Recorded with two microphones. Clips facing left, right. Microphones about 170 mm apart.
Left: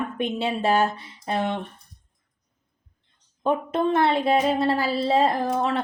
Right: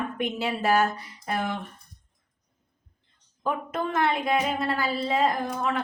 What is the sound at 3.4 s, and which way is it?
Speech, 25° left (ahead or behind).